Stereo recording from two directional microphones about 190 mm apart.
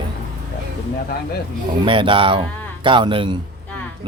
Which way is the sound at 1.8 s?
25° right (ahead or behind).